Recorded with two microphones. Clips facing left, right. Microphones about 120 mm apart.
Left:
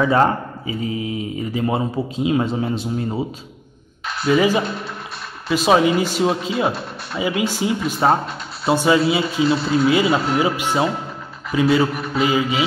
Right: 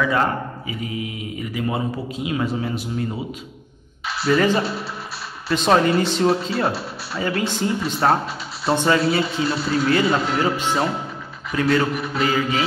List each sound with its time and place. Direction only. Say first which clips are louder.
0.0 s speech: left 4 dB; 30° left (ahead or behind)
4.1 s a sound: left 1 dB; 5° right (ahead or behind)
4.4 s a man's voice: left 1 dB; 10° left (ahead or behind)